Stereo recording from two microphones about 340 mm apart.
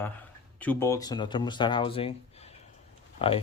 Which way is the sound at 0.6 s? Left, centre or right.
Centre.